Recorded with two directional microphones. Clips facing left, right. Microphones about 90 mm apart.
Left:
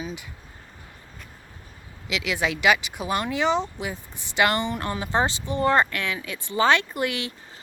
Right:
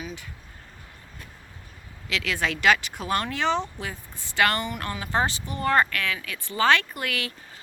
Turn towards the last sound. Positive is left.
turn(degrees=20)  # may be behind; listen again after turning